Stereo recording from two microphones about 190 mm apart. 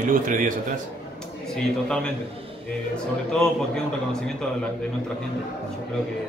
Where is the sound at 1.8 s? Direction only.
5° left (ahead or behind).